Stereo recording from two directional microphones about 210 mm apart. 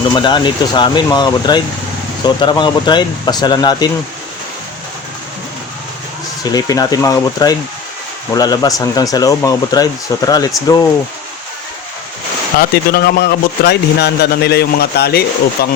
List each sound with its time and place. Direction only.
0.1 s speech: 20° left (ahead or behind)
6.4 s speech: 20° left (ahead or behind)
12.5 s speech: 45° left (ahead or behind)